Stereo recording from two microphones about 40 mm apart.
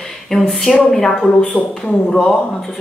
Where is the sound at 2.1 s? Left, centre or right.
Left.